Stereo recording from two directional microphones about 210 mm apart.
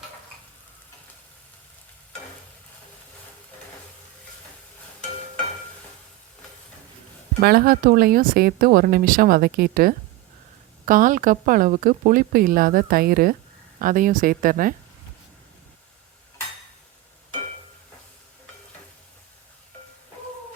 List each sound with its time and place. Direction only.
7.4 s a woman's voice: 45° right (ahead or behind)